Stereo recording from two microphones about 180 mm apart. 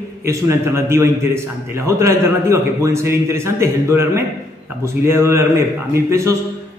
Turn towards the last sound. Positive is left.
turn(degrees=-15)  # may be behind; listen again after turning